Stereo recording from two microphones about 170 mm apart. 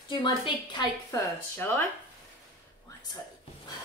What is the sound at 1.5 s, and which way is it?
Speech, 15° left (ahead or behind).